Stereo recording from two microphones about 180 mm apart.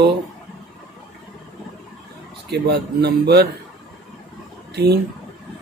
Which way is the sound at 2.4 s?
70° right (ahead or behind).